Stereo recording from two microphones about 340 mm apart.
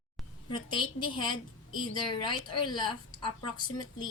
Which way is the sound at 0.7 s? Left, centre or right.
Centre.